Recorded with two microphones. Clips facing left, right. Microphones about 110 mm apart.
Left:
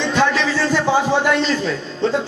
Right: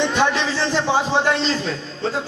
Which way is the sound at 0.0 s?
20° right (ahead or behind).